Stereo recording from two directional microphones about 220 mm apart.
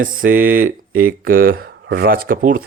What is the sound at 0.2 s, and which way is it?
Speech, 40° right (ahead or behind).